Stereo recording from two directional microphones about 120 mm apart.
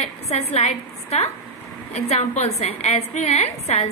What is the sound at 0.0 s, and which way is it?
A woman's voice, 60° left (ahead or behind).